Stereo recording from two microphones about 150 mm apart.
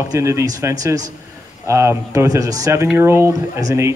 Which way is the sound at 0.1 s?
20° right (ahead or behind).